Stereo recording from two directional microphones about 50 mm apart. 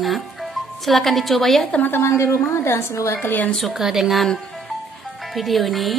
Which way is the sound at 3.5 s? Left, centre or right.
Centre.